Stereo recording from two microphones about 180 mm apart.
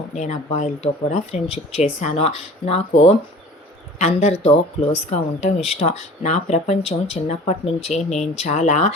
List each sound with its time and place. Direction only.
0.2 s speech: 40° left (ahead or behind)